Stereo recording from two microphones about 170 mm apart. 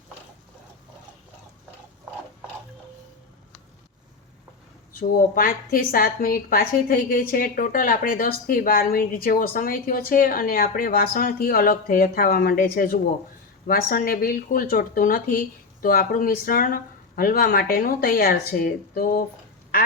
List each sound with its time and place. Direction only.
4.9 s a woman's voice: 55° left (ahead or behind)